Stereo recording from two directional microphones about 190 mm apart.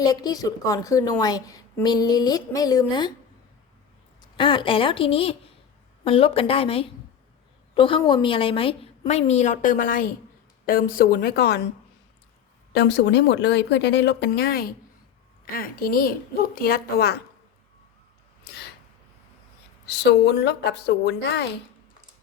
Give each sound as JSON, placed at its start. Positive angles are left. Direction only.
{"t": 0.0, "sound": "speech", "side_deg": 20}
{"t": 4.2, "sound": "a woman's voice", "side_deg": 25}
{"t": 12.7, "sound": "a woman's voice", "side_deg": 65}
{"t": 19.9, "sound": "speech", "side_deg": 60}